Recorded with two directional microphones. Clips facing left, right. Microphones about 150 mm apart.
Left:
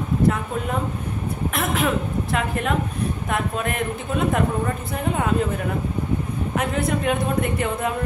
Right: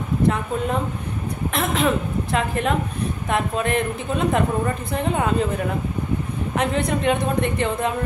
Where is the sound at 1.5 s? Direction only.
5° left (ahead or behind).